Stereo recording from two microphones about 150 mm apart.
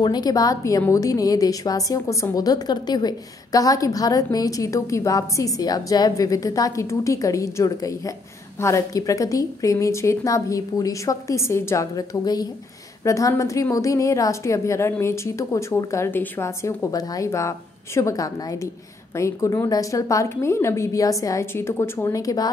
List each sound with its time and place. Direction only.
0.0 s a woman's voice: 25° left (ahead or behind)